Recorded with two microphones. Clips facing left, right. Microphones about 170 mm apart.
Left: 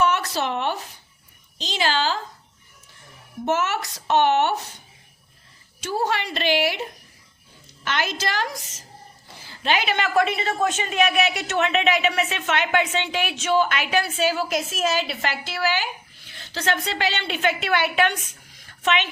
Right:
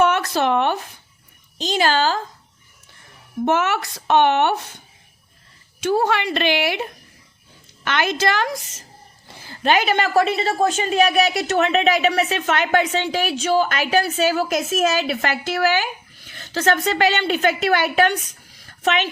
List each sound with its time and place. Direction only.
0.0 s a sound: 55° right (ahead or behind)
1.5 s a woman's voice: 50° right (ahead or behind)
3.4 s speech: 60° right (ahead or behind)
5.8 s speech: 60° right (ahead or behind)
7.9 s speech: 60° right (ahead or behind)
9.5 s a woman's voice: 50° right (ahead or behind)